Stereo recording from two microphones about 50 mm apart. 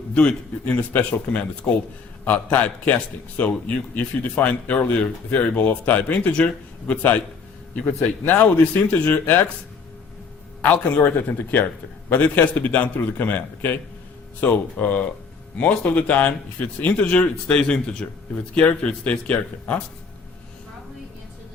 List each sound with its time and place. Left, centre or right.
0.1 s a man's voice: left
8.3 s a man's voice: left
10.6 s a man's voice: left